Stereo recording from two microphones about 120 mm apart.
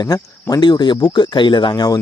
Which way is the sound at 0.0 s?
30° left (ahead or behind).